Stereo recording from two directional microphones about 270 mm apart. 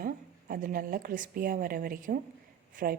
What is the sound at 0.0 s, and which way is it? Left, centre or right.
A woman's voice, right.